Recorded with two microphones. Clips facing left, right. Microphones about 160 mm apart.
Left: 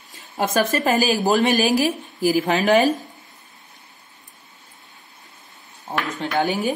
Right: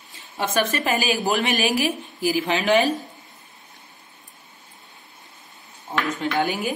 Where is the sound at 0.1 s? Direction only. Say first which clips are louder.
Left 3 dB; 40° left (ahead or behind).